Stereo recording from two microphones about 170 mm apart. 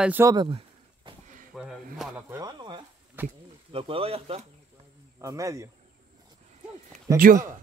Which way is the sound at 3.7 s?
35° right (ahead or behind).